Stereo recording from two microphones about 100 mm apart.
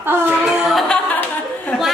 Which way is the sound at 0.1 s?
20° right (ahead or behind).